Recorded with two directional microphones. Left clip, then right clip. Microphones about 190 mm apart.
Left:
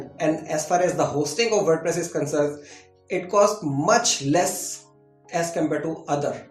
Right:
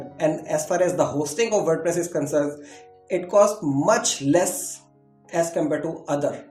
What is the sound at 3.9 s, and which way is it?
Speech, 45° right (ahead or behind).